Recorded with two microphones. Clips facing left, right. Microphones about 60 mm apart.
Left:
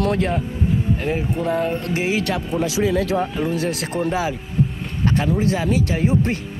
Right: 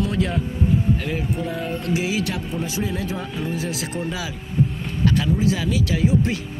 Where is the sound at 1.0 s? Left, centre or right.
Left.